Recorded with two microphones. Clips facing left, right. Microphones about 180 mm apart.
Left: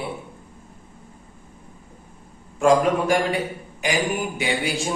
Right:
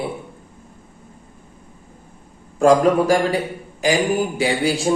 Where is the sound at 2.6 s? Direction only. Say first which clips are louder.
Right 4 dB; 35° right (ahead or behind).